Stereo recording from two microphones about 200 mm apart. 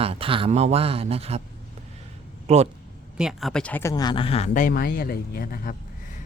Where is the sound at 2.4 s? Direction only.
35° right (ahead or behind).